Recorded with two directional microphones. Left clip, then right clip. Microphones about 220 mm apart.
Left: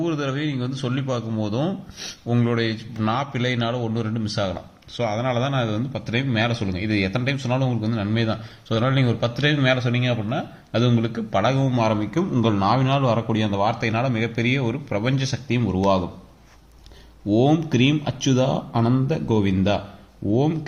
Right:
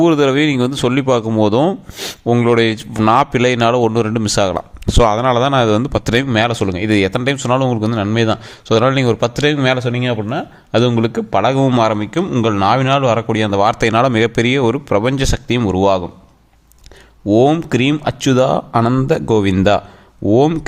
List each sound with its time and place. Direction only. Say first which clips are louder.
0.0 s a man's voice: right 13 dB; 45° right (ahead or behind)
17.2 s a man's voice: right 8 dB; 50° right (ahead or behind)